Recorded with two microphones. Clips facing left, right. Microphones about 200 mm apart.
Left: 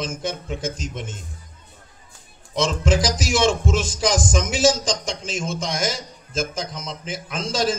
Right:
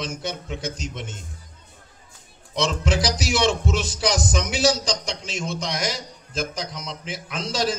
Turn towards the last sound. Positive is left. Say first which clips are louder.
# left 2 dB
turn(degrees=50)  # may be behind; listen again after turning